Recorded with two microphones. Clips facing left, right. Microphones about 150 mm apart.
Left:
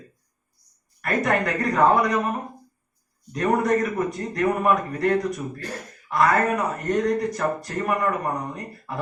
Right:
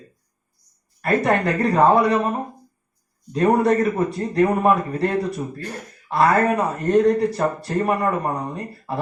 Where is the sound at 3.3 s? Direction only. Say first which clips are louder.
Right 4 dB; 30° right (ahead or behind).